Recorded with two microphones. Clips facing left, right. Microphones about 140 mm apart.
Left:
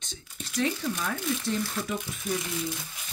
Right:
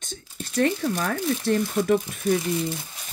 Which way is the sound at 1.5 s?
65° right (ahead or behind).